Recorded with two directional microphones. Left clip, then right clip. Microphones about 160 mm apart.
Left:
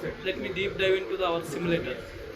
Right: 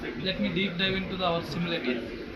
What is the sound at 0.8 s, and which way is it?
A man's voice, 25° left (ahead or behind).